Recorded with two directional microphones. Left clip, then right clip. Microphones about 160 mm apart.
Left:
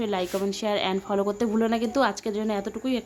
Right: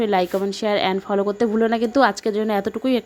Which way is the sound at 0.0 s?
30° right (ahead or behind).